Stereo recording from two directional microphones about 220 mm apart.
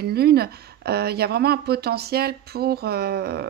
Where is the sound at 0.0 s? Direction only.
45° right (ahead or behind).